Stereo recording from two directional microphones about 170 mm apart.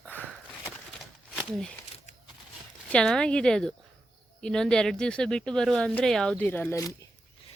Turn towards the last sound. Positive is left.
turn(degrees=15)  # may be behind; listen again after turning